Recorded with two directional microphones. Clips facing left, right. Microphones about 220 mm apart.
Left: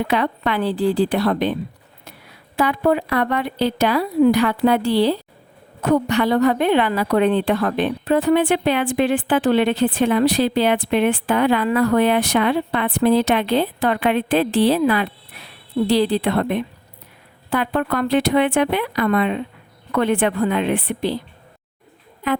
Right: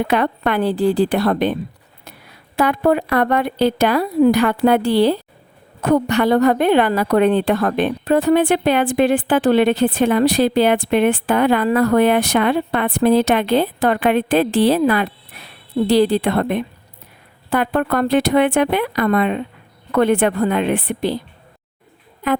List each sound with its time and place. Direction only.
0.1 s a woman's voice: 50° right (ahead or behind)
2.6 s a woman's voice: 50° right (ahead or behind)